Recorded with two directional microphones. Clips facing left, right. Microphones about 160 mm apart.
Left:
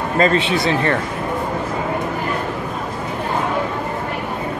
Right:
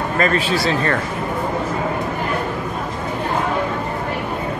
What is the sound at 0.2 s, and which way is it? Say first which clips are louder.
Speech: left 2 dB; 25° left (ahead or behind).